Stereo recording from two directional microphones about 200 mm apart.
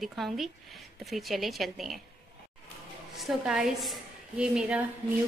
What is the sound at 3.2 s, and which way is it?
A woman's voice, centre (ahead or behind).